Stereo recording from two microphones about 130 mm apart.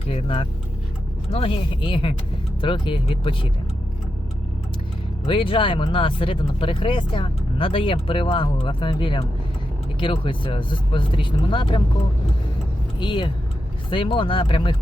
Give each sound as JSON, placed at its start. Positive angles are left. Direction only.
{"t": 0.1, "sound": "speech", "side_deg": 45}
{"t": 5.2, "sound": "speech", "side_deg": 40}
{"t": 13.0, "sound": "speech", "side_deg": 35}